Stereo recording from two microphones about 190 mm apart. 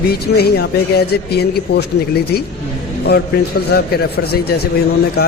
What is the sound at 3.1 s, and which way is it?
Speech, 55° left (ahead or behind).